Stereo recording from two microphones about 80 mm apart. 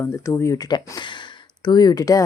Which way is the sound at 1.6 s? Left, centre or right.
Left.